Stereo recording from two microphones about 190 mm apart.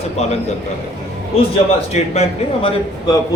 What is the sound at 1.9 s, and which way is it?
Speech, 35° left (ahead or behind).